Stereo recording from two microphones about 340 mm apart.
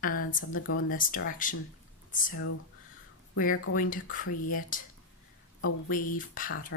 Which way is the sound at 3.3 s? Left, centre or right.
Left.